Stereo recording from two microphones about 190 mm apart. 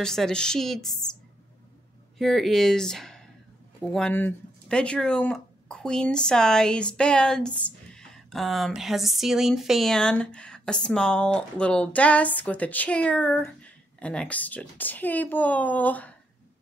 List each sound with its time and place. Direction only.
0.0 s speech: 5° left (ahead or behind)
2.1 s speech: centre (ahead or behind)